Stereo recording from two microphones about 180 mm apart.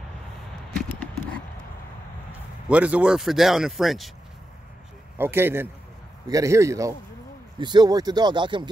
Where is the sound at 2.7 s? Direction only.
5° right (ahead or behind).